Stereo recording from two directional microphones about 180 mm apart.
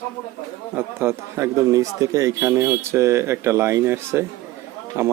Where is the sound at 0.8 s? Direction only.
15° right (ahead or behind).